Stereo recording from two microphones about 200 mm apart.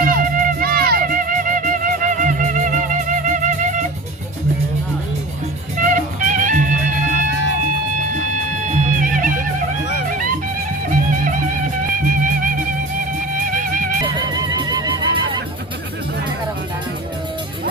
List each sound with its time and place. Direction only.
0.0 s music: 45° right (ahead or behind)
5.7 s music: 40° right (ahead or behind)
11.9 s music: 45° right (ahead or behind)
14.0 s music: 20° right (ahead or behind)